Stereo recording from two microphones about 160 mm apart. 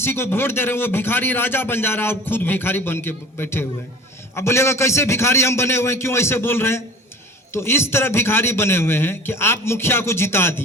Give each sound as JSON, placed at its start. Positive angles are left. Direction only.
{"t": 0.0, "sound": "a man's voice", "side_deg": 15}